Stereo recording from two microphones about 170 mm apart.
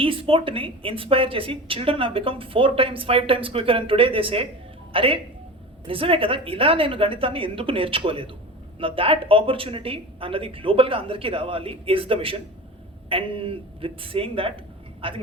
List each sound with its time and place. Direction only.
0.0 s a woman's voice: 30° right (ahead or behind)